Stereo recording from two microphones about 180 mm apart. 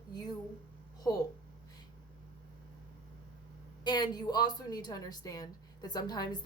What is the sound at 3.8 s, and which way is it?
A woman's voice, 25° left (ahead or behind).